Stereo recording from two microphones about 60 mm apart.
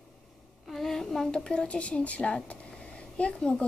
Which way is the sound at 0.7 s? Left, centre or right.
Centre.